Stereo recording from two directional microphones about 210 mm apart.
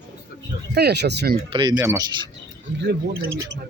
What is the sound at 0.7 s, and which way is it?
Speech, 50° right (ahead or behind).